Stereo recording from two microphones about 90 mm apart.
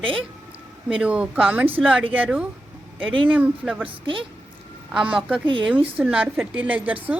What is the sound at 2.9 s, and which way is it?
Speech, 70° right (ahead or behind).